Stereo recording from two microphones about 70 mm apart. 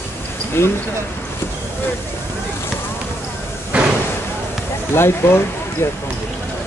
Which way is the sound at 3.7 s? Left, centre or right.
Centre.